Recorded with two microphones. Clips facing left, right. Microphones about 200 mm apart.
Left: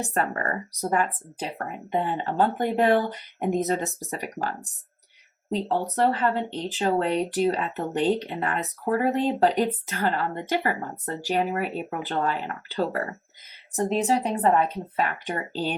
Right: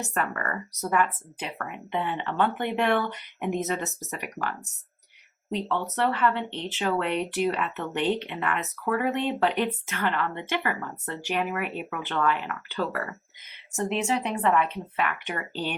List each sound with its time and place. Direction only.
0.0 s speech: 35° left (ahead or behind)